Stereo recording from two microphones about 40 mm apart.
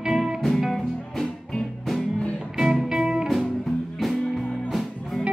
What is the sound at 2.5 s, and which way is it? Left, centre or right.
Music, centre.